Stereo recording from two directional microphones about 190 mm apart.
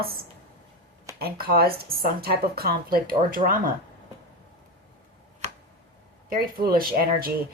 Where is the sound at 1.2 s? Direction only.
55° right (ahead or behind).